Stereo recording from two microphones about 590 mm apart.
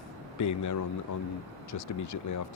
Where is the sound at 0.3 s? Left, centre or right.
Left.